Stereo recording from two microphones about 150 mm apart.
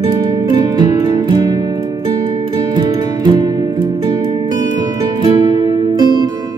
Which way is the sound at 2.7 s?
30° right (ahead or behind).